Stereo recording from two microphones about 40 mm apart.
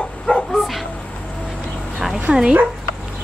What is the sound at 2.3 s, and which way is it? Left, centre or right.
Speech, right.